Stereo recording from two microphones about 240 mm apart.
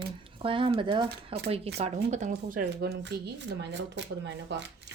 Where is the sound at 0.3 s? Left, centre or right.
Right.